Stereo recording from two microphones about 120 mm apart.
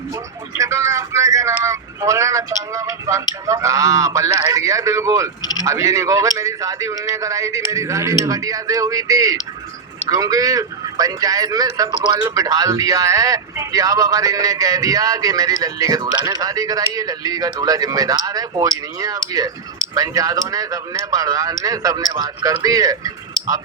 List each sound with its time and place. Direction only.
0.5 s a man's voice: 25° right (ahead or behind)